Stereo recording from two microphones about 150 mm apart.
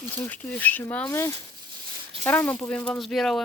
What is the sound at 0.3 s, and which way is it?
Speech, 10° left (ahead or behind).